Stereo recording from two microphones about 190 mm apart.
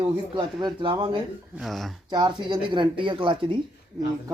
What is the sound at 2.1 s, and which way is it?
Speech, 25° right (ahead or behind).